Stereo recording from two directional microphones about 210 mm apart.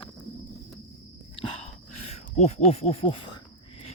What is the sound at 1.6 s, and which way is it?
Speech, 30° left (ahead or behind).